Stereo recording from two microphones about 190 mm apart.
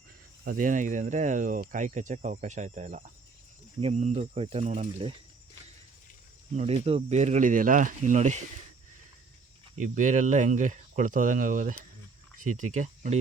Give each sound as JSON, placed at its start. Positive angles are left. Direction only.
{"t": 0.4, "sound": "speech", "side_deg": -45}
{"t": 6.6, "sound": "speech", "side_deg": -35}
{"t": 9.7, "sound": "speech", "side_deg": -40}